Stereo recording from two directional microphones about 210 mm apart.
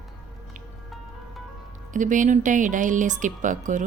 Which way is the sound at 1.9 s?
35° right (ahead or behind).